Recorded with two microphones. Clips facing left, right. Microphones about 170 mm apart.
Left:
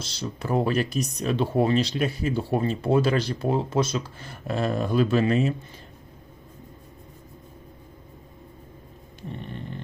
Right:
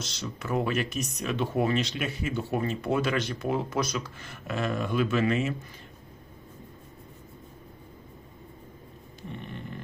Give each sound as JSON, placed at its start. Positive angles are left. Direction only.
{"t": 0.0, "sound": "speech", "side_deg": 30}